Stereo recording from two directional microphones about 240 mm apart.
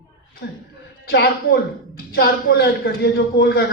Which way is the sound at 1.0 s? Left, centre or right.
Left.